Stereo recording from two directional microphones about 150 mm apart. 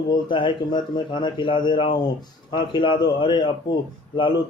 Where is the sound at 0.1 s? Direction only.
35° left (ahead or behind).